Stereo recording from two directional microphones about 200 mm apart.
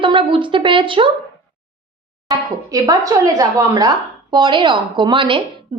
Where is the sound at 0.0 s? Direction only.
25° right (ahead or behind).